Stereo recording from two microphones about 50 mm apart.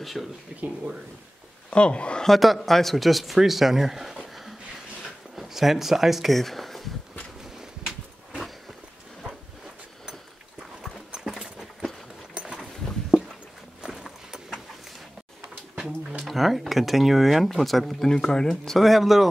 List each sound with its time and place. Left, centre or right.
0.0 s speech: centre
0.5 s speech: right
1.7 s speech: left
2.2 s speech: centre
5.3 s speech: centre
11.1 s a sound: centre
13.8 s clip-clop: centre
16.3 s speech: centre
18.0 s speech: centre